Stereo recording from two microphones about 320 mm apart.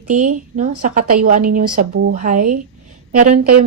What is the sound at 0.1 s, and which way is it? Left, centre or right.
Speech, right.